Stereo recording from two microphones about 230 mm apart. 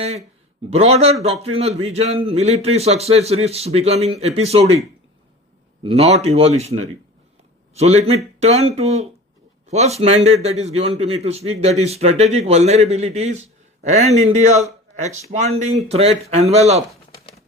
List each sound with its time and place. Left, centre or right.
0.0 s a man's voice: right
5.8 s a man's voice: right